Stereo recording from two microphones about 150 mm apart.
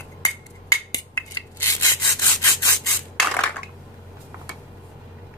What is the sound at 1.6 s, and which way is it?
Wood, 20° left (ahead or behind).